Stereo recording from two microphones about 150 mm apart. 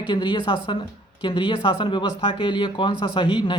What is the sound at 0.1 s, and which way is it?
A woman's voice, 30° left (ahead or behind).